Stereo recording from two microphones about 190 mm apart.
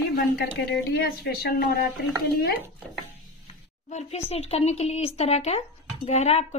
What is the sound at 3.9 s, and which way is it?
A woman's voice, 35° left (ahead or behind).